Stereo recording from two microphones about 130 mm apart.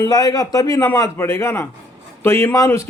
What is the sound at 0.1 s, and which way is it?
Speech, 30° left (ahead or behind).